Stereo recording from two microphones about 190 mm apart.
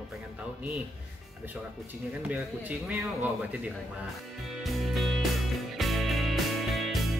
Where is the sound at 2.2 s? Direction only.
10° right (ahead or behind).